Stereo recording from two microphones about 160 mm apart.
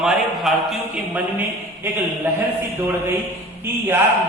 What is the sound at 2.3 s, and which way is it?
Speech, 15° right (ahead or behind).